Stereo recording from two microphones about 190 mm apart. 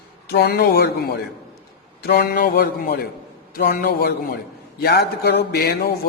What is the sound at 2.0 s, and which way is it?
A man's voice, 55° left (ahead or behind).